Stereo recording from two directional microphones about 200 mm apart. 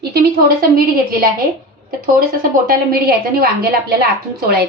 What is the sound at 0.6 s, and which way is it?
Speech, 45° right (ahead or behind).